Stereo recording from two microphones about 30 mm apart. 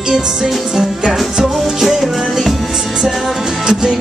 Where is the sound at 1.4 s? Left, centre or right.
Centre.